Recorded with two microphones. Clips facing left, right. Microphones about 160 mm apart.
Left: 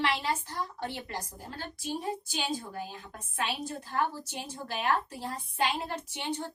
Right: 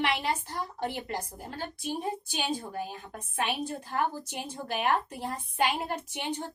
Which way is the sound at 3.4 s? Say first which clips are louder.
Right 2 dB; 60° right (ahead or behind).